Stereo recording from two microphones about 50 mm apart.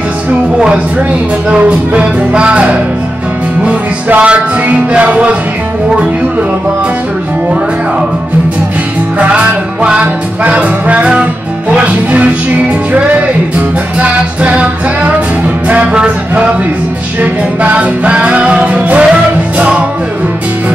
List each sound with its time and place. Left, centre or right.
1.5 s music: right
4.1 s music: right
9.2 s music: right
13.9 s music: right